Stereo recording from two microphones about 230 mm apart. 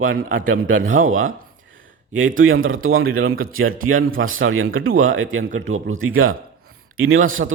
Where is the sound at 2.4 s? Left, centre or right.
Right.